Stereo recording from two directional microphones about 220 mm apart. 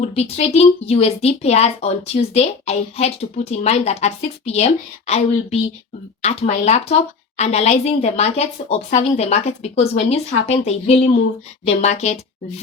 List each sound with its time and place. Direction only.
0.0 s a woman's voice: 30° left (ahead or behind)